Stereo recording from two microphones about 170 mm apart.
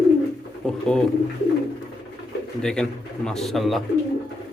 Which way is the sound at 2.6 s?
5° left (ahead or behind).